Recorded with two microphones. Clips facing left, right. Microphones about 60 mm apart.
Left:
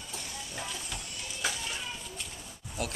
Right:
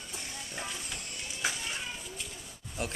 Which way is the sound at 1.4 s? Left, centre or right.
Right.